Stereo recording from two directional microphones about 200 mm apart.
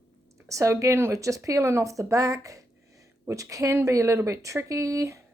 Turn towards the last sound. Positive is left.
turn(degrees=-15)  # may be behind; listen again after turning